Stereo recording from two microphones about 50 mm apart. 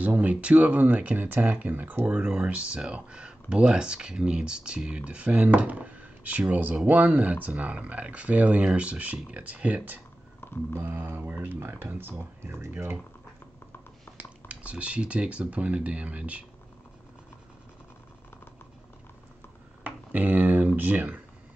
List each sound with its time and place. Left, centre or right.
0.0 s speech: right
1.1 s speech: right
2.0 s speech: right
10.4 s a sound: left
10.8 s speech: right
14.5 s speech: right
19.8 s speech: right